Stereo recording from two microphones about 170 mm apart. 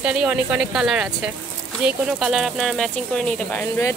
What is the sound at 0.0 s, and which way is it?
Speech, 5° right (ahead or behind).